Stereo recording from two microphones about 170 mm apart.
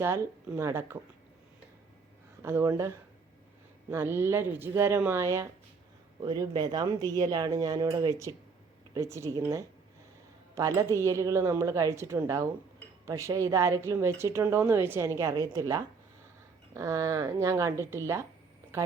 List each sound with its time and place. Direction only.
0.0 s speech: 15° right (ahead or behind)
2.4 s a woman's voice: 15° right (ahead or behind)